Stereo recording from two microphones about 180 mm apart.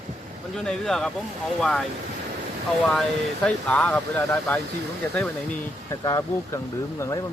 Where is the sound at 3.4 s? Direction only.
5° left (ahead or behind).